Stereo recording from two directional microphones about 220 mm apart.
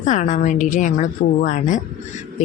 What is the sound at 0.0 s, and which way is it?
A woman's voice, 35° left (ahead or behind).